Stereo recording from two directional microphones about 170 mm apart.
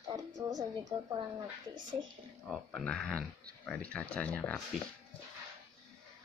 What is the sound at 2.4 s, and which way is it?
Speech, centre (ahead or behind).